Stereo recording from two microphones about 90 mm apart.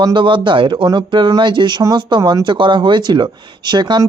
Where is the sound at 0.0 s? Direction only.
60° right (ahead or behind).